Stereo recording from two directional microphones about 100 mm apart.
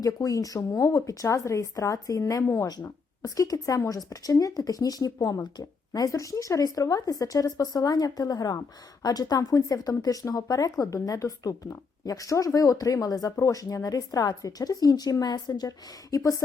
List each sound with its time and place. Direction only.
0.0 s speech: 35° left (ahead or behind)